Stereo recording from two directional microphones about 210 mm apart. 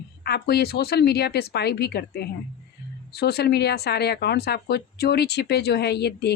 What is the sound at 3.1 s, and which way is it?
Speech, 50° left (ahead or behind).